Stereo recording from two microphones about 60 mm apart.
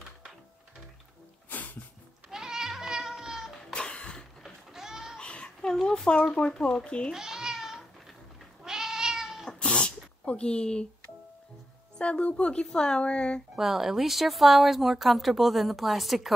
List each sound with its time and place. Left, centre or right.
1.5 s music: left
2.2 s cat: centre
3.7 s a sound: centre
4.4 s goat: centre
5.2 s speech: centre
7.2 s cat: centre
9.6 s a sound: centre
12.0 s speech: centre
13.6 s speech: centre